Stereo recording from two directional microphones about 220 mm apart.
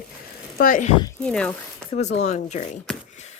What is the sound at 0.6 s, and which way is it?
Speech, 35° left (ahead or behind).